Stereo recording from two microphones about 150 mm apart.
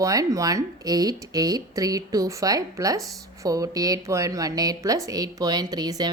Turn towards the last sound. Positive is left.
turn(degrees=-25)  # may be behind; listen again after turning